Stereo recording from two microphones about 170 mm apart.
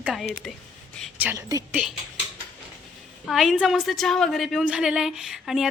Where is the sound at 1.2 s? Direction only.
15° right (ahead or behind).